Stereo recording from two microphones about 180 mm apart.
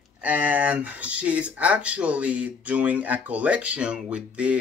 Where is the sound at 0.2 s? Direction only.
10° right (ahead or behind).